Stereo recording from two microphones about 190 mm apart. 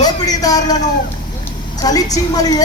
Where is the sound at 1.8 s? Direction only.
20° left (ahead or behind).